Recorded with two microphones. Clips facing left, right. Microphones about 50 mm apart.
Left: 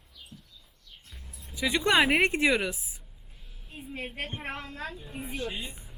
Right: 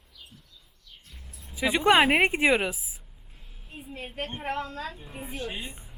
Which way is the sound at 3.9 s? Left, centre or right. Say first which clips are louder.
Right 1 dB; left.